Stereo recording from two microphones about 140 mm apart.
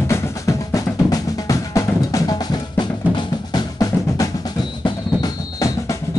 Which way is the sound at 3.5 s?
25° left (ahead or behind).